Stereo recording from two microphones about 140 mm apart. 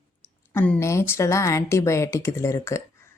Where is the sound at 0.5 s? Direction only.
10° left (ahead or behind).